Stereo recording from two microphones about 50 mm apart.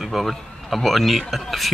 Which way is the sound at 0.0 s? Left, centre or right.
Centre.